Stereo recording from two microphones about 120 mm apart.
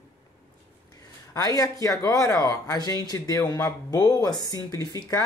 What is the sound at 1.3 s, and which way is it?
A woman's voice, 30° left (ahead or behind).